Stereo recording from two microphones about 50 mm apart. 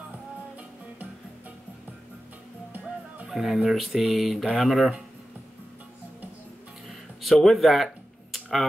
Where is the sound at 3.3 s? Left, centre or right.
Centre.